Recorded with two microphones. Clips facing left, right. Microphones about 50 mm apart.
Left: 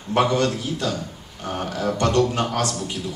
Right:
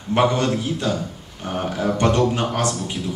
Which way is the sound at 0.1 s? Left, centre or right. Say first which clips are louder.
Right 1 dB; right.